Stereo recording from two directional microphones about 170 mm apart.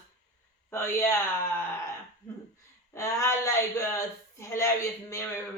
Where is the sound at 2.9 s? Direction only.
15° left (ahead or behind).